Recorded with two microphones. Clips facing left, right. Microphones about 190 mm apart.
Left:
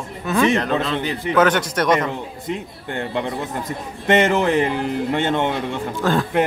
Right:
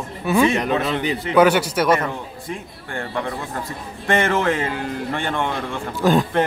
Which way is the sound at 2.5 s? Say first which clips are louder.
Left 4 dB; 20° left (ahead or behind).